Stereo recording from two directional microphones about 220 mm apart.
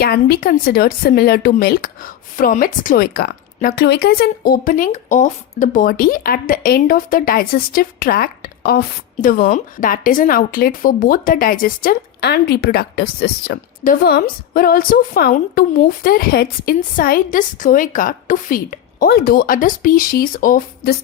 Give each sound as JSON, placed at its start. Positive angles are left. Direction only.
{"t": 0.0, "sound": "a woman's voice", "side_deg": 45}